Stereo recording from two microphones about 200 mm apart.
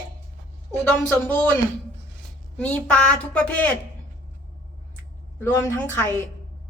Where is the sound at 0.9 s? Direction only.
10° left (ahead or behind).